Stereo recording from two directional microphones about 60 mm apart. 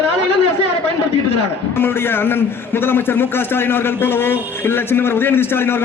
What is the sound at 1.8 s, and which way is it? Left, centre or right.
A man's voice, left.